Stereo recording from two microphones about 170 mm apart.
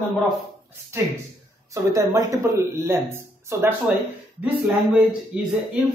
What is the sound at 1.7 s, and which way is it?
A woman's voice, 20° right (ahead or behind).